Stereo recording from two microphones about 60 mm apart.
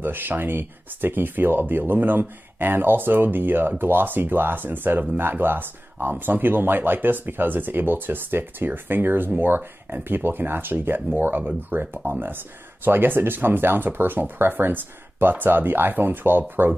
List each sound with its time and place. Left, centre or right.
0.0 s speech: right